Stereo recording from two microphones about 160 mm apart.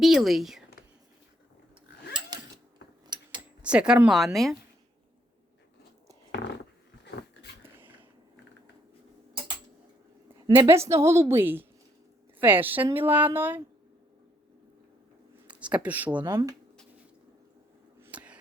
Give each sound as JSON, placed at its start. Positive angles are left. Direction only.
{"t": 0.0, "sound": "speech", "side_deg": 0}
{"t": 3.1, "sound": "a sound", "side_deg": -25}
{"t": 3.6, "sound": "speech", "side_deg": -5}
{"t": 10.4, "sound": "a woman's voice", "side_deg": -20}
{"t": 15.4, "sound": "speech", "side_deg": -10}
{"t": 16.3, "sound": "speech", "side_deg": -20}
{"t": 18.0, "sound": "a sound", "side_deg": -10}